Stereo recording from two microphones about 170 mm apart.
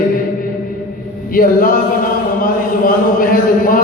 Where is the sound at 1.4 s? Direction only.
55° left (ahead or behind).